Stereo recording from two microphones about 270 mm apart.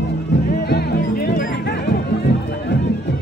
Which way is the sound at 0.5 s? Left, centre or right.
Left.